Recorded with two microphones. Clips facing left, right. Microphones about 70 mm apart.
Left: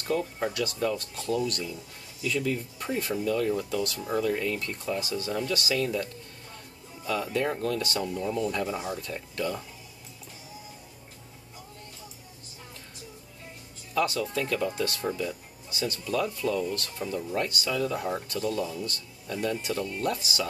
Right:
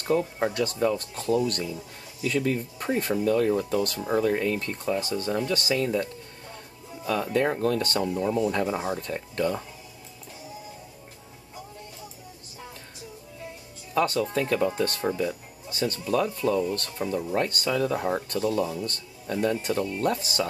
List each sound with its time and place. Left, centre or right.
0.1 s speech: right
2.2 s speech: right
7.1 s speech: right
8.0 s speech: right
13.9 s a man's voice: right